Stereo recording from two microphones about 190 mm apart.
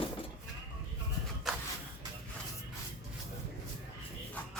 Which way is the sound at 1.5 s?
Centre (ahead or behind).